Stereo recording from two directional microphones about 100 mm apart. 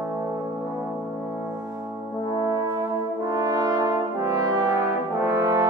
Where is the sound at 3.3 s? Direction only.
35° right (ahead or behind).